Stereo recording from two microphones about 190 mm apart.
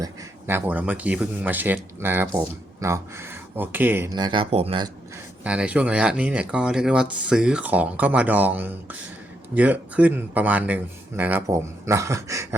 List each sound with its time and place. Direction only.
0.0 s speech: 10° right (ahead or behind); by 4.9 s 30° right (ahead or behind)
5.4 s speech: 5° right (ahead or behind)